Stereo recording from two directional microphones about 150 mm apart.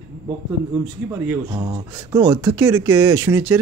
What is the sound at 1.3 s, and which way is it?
Speech, 25° right (ahead or behind).